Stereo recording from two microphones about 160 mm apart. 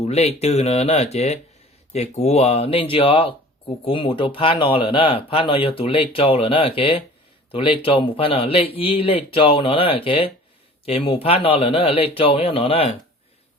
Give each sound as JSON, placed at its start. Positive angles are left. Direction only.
{"t": 0.0, "sound": "speech", "side_deg": 40}